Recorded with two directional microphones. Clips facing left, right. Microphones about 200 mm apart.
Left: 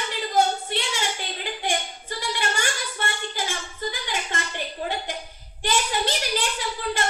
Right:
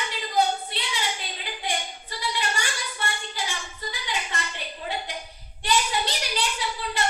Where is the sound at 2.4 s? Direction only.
50° left (ahead or behind).